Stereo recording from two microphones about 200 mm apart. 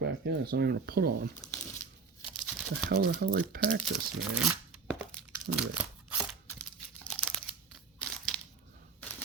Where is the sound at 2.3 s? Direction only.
Centre (ahead or behind).